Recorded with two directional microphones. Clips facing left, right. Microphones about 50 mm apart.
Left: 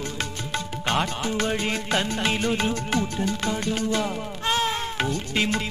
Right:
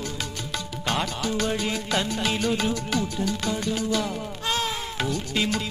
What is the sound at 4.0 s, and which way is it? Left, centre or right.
Music, left.